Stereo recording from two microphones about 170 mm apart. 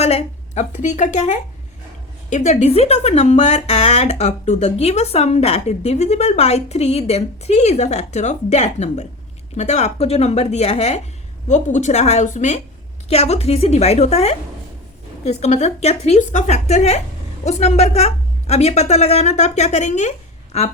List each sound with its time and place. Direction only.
0.0 s a woman's voice: 40° left (ahead or behind)